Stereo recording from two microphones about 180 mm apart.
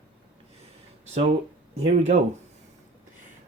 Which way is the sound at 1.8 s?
35° right (ahead or behind).